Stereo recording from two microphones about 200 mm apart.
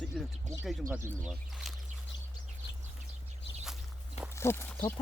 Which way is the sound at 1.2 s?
5° right (ahead or behind).